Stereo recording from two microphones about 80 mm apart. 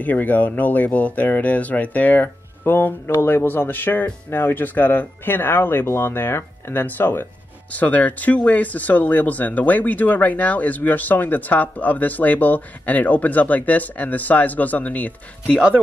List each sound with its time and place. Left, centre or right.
0.0 s speech: left